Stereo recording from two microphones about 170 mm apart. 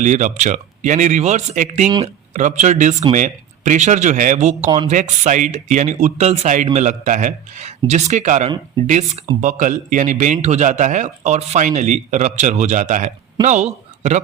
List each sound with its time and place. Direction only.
0.0 s a man's voice: 45° right (ahead or behind)